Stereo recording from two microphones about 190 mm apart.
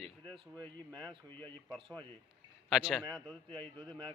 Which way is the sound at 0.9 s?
25° right (ahead or behind).